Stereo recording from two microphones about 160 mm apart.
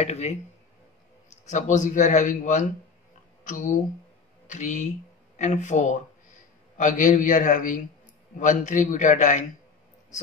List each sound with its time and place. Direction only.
0.0 s a man's voice: 40° left (ahead or behind)